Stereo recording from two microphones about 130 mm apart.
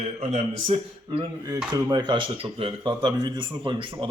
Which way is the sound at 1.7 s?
35° right (ahead or behind).